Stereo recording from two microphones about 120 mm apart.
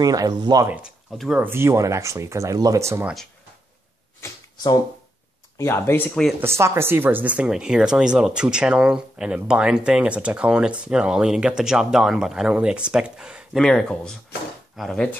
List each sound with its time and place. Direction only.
0.0 s speech: 30° right (ahead or behind)
0.7 s speech: 15° right (ahead or behind)
1.1 s speech: centre (ahead or behind)
1.4 s speech: 20° right (ahead or behind)
4.2 s a sound: 30° left (ahead or behind)
5.6 s speech: 20° left (ahead or behind)
6.4 s speech: 20° right (ahead or behind); by 15.0 s centre (ahead or behind)